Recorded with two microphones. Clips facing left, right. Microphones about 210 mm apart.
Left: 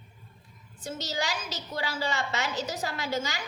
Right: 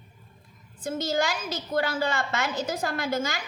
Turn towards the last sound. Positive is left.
turn(degrees=-50)  # may be behind; listen again after turning